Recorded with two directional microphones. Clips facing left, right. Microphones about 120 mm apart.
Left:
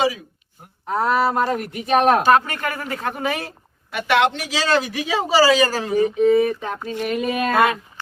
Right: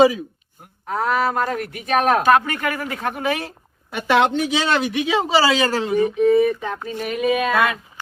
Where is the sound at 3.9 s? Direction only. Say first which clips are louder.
Right 1 dB; 25° right (ahead or behind).